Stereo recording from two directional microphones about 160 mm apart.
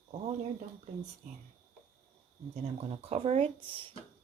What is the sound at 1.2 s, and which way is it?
Speech, 45° right (ahead or behind).